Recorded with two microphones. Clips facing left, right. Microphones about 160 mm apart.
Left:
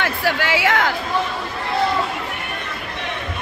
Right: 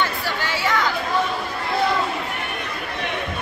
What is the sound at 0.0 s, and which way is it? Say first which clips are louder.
Chatter: left 3 dB; 80° left.